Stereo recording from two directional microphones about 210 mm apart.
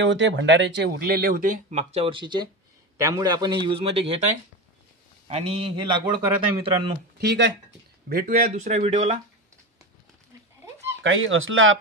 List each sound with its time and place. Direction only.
0.0 s a man's voice: 60° right (ahead or behind); by 4.2 s 25° right (ahead or behind)
5.3 s a man's voice: 25° right (ahead or behind)
7.2 s speech: 55° right (ahead or behind)
8.1 s speech: 45° right (ahead or behind)
11.0 s speech: 65° right (ahead or behind)